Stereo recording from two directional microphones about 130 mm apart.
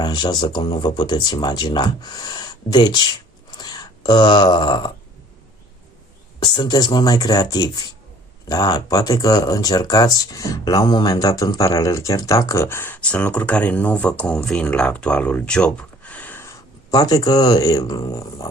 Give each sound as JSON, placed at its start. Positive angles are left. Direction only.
{"t": 0.0, "sound": "speech", "side_deg": 35}
{"t": 3.6, "sound": "a sound", "side_deg": 35}
{"t": 6.4, "sound": "speech", "side_deg": 35}